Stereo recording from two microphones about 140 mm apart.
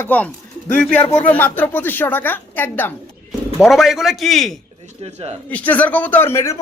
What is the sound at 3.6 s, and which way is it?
A man's voice, centre (ahead or behind).